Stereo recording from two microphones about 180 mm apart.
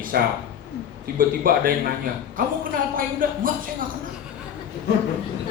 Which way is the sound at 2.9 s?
50° right (ahead or behind).